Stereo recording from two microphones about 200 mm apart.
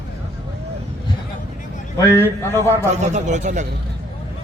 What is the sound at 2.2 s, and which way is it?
Speech, 10° left (ahead or behind).